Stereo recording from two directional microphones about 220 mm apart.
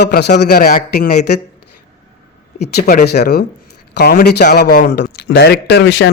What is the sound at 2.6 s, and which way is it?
Speech, 45° left (ahead or behind).